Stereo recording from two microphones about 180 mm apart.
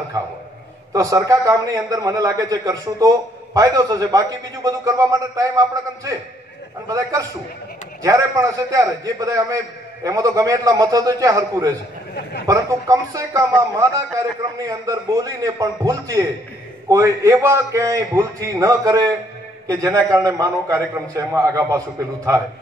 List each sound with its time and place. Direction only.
0.9 s a man's voice: 20° right (ahead or behind)